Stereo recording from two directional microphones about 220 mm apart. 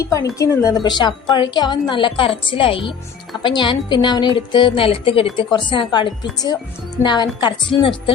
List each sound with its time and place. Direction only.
0.0 s a woman's voice: 15° left (ahead or behind)